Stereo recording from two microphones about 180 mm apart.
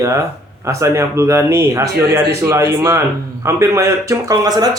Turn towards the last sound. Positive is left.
turn(degrees=-20)  # may be behind; listen again after turning